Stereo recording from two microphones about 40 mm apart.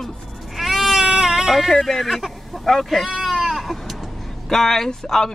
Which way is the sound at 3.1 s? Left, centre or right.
Centre.